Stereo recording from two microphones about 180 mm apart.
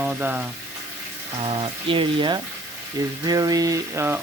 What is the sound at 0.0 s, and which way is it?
Speech, 10° right (ahead or behind).